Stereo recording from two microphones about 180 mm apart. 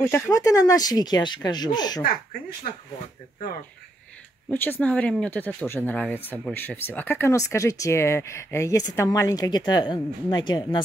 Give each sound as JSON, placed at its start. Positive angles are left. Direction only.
{"t": 0.0, "sound": "speech", "side_deg": 15}
{"t": 4.5, "sound": "speech", "side_deg": 10}